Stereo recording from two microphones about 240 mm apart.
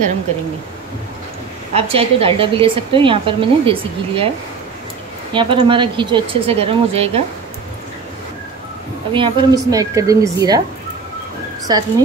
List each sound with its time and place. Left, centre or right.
1.7 s a woman's voice: right
5.3 s a woman's voice: right
9.1 s a woman's voice: centre
11.7 s a woman's voice: centre